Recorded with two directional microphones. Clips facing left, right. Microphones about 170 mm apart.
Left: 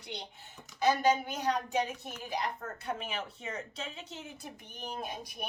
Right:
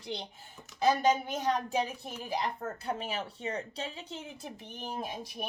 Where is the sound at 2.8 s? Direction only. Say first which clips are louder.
Right 1 dB; 35° right (ahead or behind).